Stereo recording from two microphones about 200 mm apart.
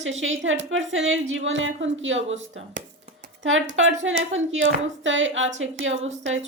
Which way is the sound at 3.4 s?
75° right (ahead or behind).